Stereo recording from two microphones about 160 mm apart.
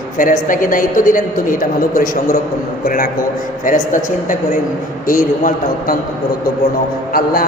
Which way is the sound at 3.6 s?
55° left (ahead or behind).